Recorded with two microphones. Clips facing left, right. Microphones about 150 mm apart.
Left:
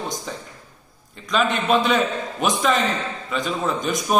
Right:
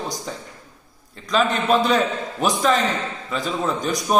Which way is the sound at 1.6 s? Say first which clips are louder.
Right 1 dB; centre (ahead or behind).